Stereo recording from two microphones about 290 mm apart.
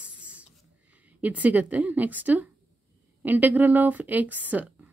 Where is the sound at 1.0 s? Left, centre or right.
Centre.